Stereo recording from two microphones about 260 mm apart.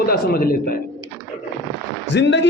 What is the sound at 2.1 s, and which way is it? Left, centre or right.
Speech, left.